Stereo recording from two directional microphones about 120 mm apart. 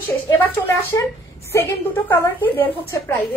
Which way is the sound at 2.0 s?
20° left (ahead or behind).